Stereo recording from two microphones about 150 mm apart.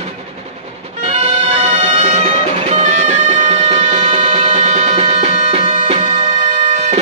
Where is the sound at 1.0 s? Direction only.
50° right (ahead or behind).